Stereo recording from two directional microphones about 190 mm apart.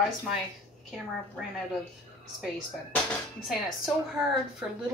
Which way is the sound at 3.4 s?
Centre (ahead or behind).